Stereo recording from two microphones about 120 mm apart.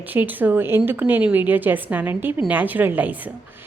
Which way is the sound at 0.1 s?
15° right (ahead or behind).